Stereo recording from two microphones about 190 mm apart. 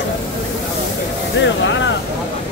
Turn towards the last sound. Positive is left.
turn(degrees=75)  # may be behind; listen again after turning